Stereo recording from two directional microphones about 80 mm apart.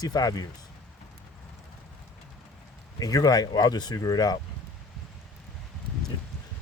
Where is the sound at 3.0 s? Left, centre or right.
Left.